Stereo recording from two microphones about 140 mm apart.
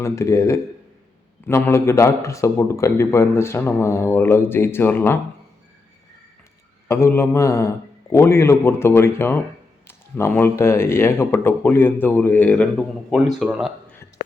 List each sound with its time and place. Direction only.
0.0 s a man's voice: 20° left (ahead or behind)
6.8 s a man's voice: 20° left (ahead or behind); by 13.7 s 5° right (ahead or behind)